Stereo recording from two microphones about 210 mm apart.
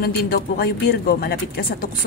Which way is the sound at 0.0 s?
45° left (ahead or behind).